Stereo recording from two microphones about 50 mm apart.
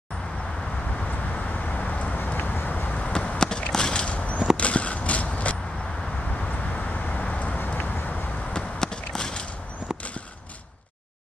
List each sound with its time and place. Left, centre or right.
1.3 s vehicle: left
2.1 s vehicle: left
2.9 s a sound: left
4.6 s horse: left
6.7 s vehicle: left
8.5 s a sound: centre